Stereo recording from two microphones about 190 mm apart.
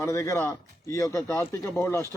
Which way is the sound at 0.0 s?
15° left (ahead or behind).